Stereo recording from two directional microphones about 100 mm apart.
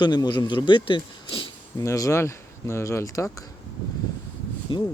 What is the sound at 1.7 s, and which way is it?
Speech, 35° left (ahead or behind).